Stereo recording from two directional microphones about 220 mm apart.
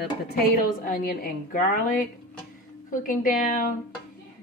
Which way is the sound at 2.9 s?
40° left (ahead or behind).